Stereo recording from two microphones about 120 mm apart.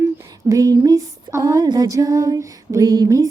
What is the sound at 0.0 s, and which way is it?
Female singing, 25° right (ahead or behind).